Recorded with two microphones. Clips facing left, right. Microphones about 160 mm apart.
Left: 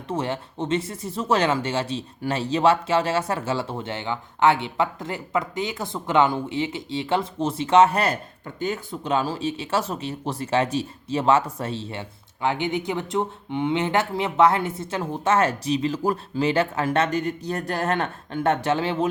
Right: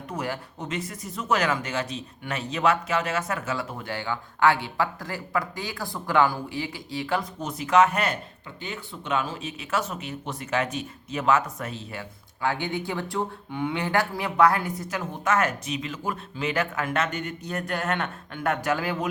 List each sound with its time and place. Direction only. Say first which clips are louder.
0.1 s speech: left 5 dB; 25° left (ahead or behind)